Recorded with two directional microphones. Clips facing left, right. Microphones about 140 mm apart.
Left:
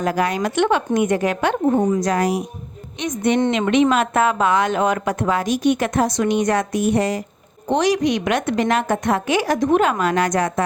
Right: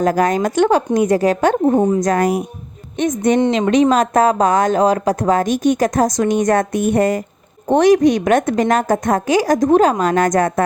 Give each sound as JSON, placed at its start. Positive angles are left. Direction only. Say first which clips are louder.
{"t": 0.0, "sound": "speech", "louder": "right 5 dB", "side_deg": -45}
{"t": 2.0, "sound": "a woman's voice", "louder": "right 3 dB", "side_deg": -50}